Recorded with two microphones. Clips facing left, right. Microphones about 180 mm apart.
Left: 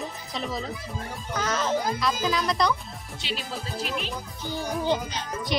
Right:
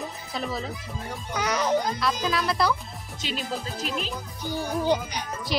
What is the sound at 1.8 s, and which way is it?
Speech, centre (ahead or behind).